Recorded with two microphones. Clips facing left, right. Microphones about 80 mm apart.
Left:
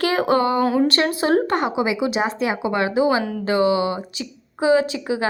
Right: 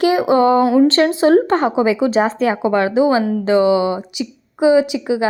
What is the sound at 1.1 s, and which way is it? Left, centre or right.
A woman's voice, right.